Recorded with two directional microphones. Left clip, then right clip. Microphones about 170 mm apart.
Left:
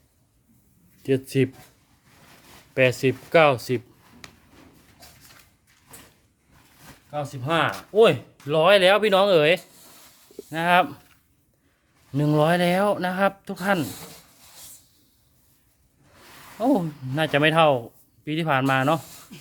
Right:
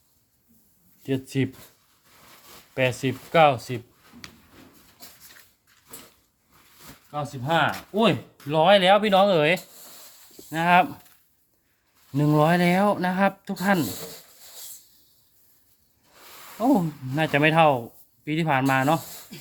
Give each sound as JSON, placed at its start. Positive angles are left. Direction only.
{"t": 1.0, "sound": "speech", "side_deg": 35}
{"t": 2.7, "sound": "speech", "side_deg": 30}
{"t": 7.1, "sound": "speech", "side_deg": 45}
{"t": 8.4, "sound": "speech", "side_deg": 30}
{"t": 12.1, "sound": "speech", "side_deg": 15}
{"t": 16.6, "sound": "speech", "side_deg": 15}